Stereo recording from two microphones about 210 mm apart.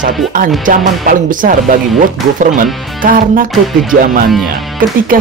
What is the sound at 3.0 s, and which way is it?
Speech, 40° right (ahead or behind).